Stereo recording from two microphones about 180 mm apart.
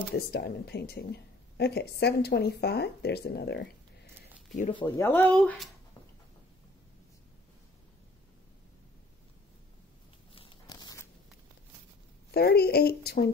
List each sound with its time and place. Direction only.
0.1 s speech: 65° left (ahead or behind)
4.8 s speech: 10° left (ahead or behind)
10.3 s a sound: 30° left (ahead or behind)
12.3 s speech: 60° left (ahead or behind)